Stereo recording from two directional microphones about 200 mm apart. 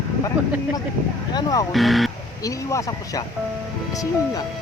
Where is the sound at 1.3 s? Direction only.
20° left (ahead or behind).